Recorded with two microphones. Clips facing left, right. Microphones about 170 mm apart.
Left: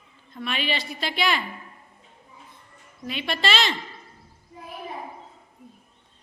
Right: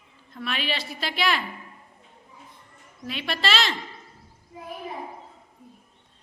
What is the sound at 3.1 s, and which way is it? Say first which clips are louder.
Speech: left 1 dB; centre (ahead or behind).